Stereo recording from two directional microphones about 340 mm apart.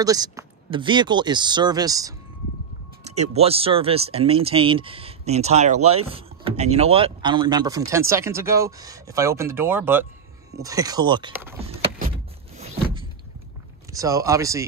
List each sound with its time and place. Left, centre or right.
0.0 s speech: centre
3.2 s speech: centre
12.5 s a sound: centre
13.9 s speech: centre